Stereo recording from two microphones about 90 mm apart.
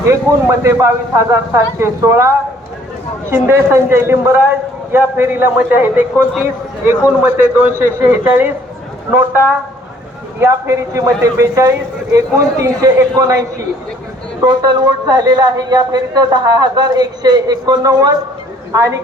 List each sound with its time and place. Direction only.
0.1 s a man's voice: 30° right (ahead or behind)
10.4 s speech: 35° right (ahead or behind)
14.4 s a man's voice: 45° right (ahead or behind)